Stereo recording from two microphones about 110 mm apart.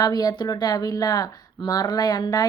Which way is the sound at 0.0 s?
35° left (ahead or behind).